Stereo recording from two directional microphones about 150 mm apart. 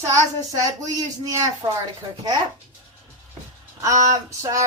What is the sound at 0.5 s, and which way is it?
Speech, 25° right (ahead or behind).